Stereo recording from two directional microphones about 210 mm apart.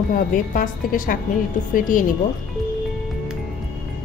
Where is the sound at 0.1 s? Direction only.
40° left (ahead or behind).